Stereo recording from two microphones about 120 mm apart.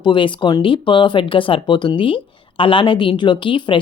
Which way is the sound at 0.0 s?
40° left (ahead or behind).